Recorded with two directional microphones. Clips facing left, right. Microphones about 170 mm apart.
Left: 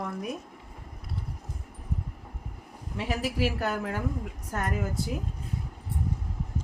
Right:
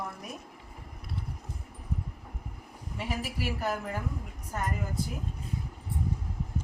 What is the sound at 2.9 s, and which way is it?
A woman's voice, 80° left.